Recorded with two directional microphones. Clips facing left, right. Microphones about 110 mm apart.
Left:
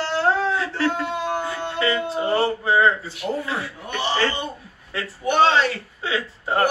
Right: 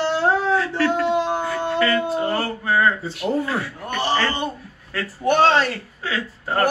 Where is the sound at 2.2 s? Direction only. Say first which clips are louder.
Left 2 dB; 20° left (ahead or behind).